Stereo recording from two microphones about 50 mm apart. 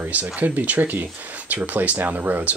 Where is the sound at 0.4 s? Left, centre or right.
Right.